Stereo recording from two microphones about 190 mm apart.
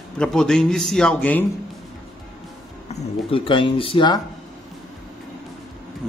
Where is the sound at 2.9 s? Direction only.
30° left (ahead or behind).